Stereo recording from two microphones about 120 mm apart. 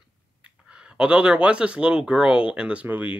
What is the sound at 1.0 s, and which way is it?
Speech, 10° right (ahead or behind).